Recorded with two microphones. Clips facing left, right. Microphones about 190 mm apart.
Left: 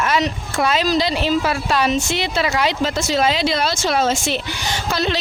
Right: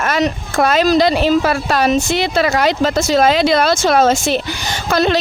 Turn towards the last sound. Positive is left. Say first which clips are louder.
# right 6 dB
turn(degrees=-50)  # may be behind; listen again after turning